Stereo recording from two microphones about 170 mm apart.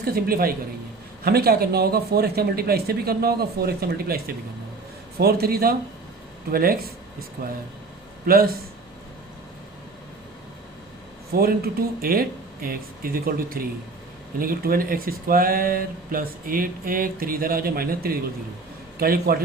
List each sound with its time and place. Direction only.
0.0 s speech: 60° right (ahead or behind)
11.3 s speech: 65° right (ahead or behind)